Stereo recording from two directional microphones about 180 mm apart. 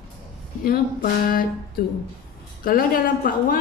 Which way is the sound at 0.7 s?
55° left (ahead or behind).